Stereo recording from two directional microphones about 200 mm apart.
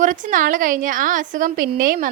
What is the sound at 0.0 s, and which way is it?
A woman's voice, 40° right (ahead or behind).